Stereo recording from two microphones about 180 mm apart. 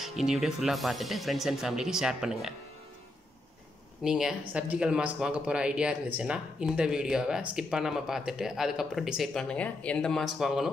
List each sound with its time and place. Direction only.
0.0 s speech: centre (ahead or behind)
4.0 s speech: 5° right (ahead or behind)